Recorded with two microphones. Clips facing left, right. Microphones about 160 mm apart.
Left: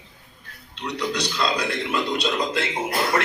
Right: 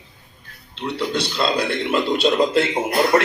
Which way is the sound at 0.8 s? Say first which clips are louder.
Right 3 dB; 30° right (ahead or behind).